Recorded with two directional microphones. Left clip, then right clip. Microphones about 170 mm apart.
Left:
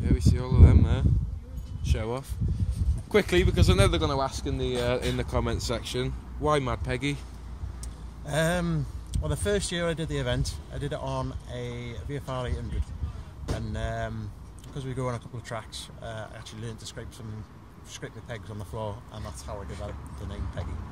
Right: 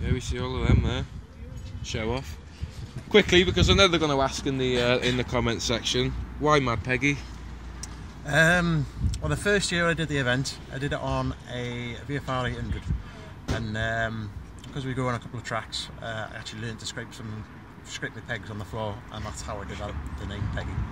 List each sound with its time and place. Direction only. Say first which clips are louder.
0.0 s speech: left 1 dB; 10° left (ahead or behind)
8.3 s speech: right 6 dB; 15° left (ahead or behind)
18.0 s speech: right 6 dB; 15° left (ahead or behind)